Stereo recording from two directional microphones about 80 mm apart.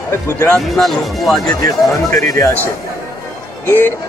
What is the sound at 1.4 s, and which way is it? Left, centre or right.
Speech, left.